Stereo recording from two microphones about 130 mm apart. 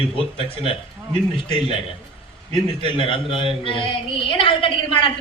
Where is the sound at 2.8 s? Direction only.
40° left (ahead or behind).